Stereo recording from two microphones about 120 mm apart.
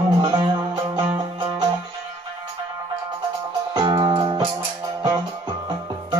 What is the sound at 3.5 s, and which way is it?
Music, 35° right (ahead or behind).